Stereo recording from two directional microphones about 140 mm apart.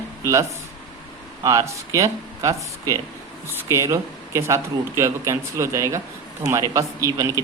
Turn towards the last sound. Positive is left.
turn(degrees=-25)  # may be behind; listen again after turning